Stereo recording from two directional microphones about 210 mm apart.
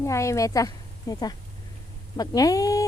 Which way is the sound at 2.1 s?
15° left (ahead or behind).